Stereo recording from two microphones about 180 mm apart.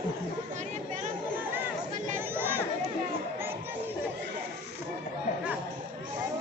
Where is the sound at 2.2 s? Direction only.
10° right (ahead or behind).